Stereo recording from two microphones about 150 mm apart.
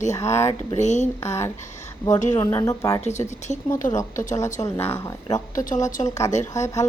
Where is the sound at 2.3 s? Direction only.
25° left (ahead or behind).